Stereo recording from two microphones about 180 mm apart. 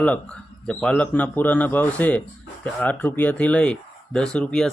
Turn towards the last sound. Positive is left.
turn(degrees=5)  # may be behind; listen again after turning